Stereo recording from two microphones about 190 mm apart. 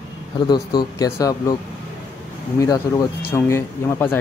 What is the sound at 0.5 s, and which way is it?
Speech, 20° left (ahead or behind).